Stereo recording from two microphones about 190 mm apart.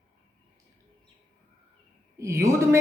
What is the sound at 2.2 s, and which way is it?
Speech, 15° right (ahead or behind).